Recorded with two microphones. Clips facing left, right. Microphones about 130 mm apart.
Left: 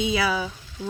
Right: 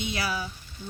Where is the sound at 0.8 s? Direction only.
90° left.